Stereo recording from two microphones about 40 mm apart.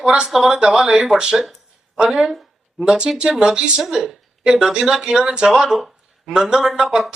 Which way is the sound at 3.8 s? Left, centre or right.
Centre.